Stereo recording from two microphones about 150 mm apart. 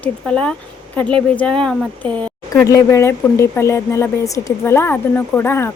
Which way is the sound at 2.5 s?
20° left (ahead or behind).